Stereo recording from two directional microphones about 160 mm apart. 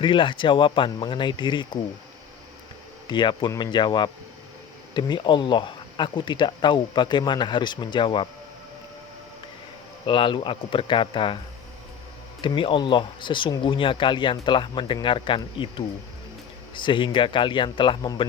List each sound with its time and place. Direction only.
0.0 s speech: 30° left (ahead or behind)
3.1 s speech: 30° left (ahead or behind)
10.1 s speech: 30° left (ahead or behind)
12.4 s speech: 30° left (ahead or behind)
16.7 s speech: 30° left (ahead or behind)